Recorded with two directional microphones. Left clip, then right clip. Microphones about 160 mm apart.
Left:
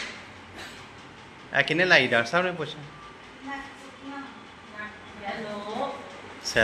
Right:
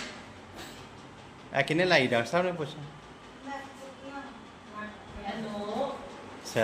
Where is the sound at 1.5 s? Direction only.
10° right (ahead or behind).